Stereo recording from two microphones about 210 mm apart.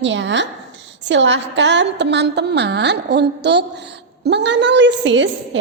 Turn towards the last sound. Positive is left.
turn(degrees=-60)  # may be behind; listen again after turning